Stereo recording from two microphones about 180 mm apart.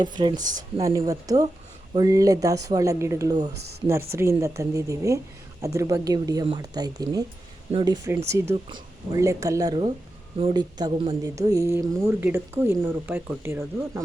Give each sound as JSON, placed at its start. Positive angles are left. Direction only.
{"t": 0.0, "sound": "a woman's voice", "side_deg": -25}
{"t": 8.3, "sound": "a woman's voice", "side_deg": -15}